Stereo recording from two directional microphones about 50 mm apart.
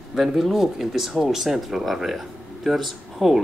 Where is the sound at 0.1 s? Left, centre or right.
Centre.